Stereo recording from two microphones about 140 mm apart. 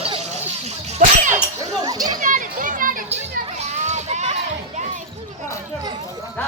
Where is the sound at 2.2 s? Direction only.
70° right (ahead or behind).